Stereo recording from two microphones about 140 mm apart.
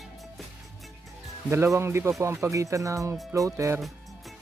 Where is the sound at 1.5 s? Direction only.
20° right (ahead or behind).